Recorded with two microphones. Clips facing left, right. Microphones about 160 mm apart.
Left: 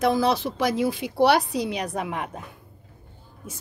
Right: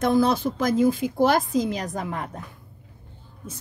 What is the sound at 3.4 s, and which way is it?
Speech, 10° left (ahead or behind).